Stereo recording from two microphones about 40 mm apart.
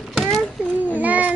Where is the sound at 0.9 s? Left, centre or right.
Right.